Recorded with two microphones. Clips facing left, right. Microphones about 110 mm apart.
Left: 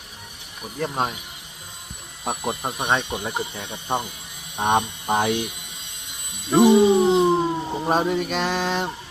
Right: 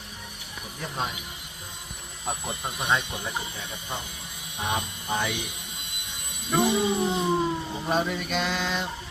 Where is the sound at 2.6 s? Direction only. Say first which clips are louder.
Left 2 dB; 30° left (ahead or behind).